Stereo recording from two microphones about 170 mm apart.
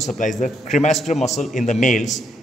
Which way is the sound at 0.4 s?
45° left (ahead or behind).